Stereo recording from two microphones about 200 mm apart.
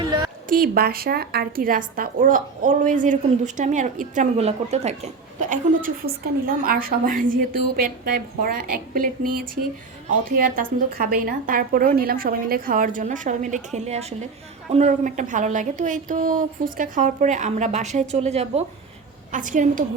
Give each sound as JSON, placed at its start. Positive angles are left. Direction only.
{"t": 0.4, "sound": "a woman's voice", "side_deg": -45}